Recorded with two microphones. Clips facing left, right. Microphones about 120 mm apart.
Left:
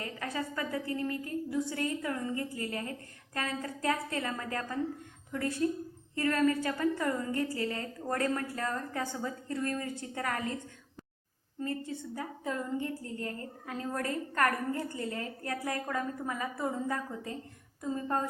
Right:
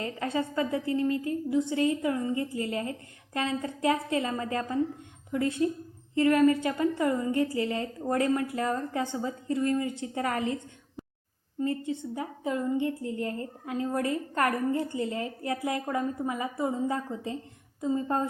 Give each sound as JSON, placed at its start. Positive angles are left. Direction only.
{"t": 0.0, "sound": "a woman's voice", "side_deg": -25}
{"t": 11.6, "sound": "a woman's voice", "side_deg": -20}